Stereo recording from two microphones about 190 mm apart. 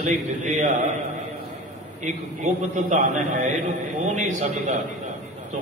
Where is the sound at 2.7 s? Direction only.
40° right (ahead or behind).